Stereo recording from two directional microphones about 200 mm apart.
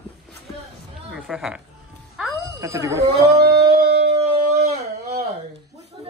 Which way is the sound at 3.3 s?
55° right (ahead or behind).